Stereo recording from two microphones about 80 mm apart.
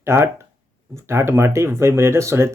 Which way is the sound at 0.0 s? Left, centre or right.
Right.